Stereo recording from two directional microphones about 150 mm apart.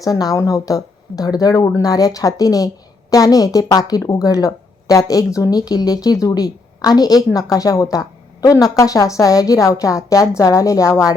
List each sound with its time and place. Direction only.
0.0 s a woman's voice: 25° left (ahead or behind)